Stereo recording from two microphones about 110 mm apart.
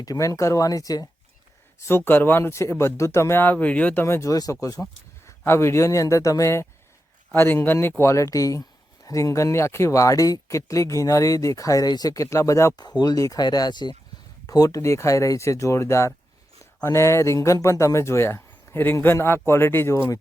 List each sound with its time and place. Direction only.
0.0 s speech: 30° left (ahead or behind)
1.8 s speech: 20° left (ahead or behind)
4.0 s speech: 25° left (ahead or behind)
12.8 s speech: 40° left (ahead or behind)